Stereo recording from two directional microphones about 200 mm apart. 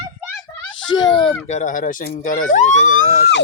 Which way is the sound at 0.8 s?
20° left (ahead or behind).